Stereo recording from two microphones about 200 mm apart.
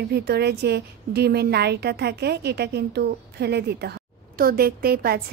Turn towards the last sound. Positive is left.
turn(degrees=-50)  # may be behind; listen again after turning